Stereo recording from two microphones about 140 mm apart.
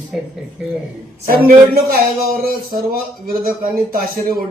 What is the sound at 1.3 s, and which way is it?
Speech, 90° right.